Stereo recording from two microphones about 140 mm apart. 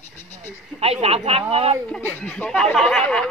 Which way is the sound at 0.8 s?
45° right (ahead or behind).